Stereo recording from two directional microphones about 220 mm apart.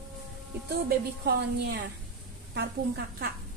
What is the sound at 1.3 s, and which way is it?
Speech, 50° right (ahead or behind).